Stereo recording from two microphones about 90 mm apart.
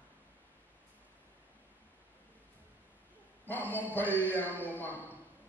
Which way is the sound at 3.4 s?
20° left (ahead or behind).